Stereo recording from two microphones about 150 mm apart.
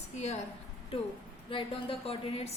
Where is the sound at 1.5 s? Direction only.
35° left (ahead or behind).